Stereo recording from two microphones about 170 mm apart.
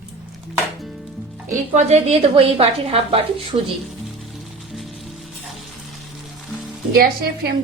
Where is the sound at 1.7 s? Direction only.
40° right (ahead or behind).